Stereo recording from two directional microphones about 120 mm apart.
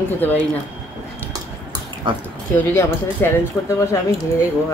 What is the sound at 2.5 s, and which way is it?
Speech, 20° left (ahead or behind).